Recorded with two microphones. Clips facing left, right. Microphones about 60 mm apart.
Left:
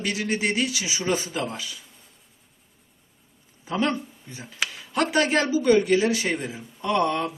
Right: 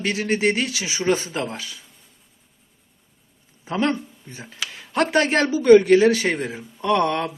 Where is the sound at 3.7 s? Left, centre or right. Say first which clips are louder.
Right 2 dB; right.